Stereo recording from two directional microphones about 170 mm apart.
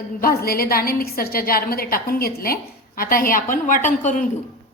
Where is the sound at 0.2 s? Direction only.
60° left (ahead or behind).